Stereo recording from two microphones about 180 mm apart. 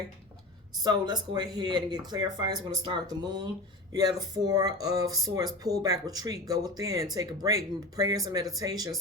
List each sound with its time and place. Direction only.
0.8 s speech: 25° right (ahead or behind)